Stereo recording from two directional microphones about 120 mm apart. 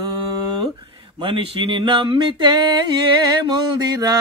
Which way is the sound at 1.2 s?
45° right (ahead or behind).